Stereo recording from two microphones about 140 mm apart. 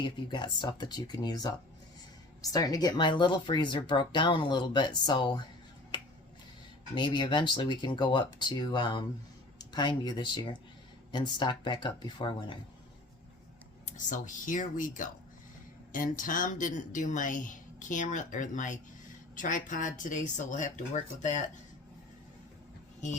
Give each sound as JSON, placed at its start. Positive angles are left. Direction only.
{"t": 0.0, "sound": "speech", "side_deg": 35}
{"t": 5.9, "sound": "finger snapping", "side_deg": 35}
{"t": 6.9, "sound": "speech", "side_deg": 35}
{"t": 13.8, "sound": "speech", "side_deg": 65}